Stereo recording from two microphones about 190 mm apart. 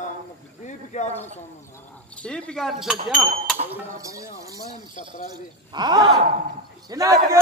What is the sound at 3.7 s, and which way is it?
Speech, 15° right (ahead or behind).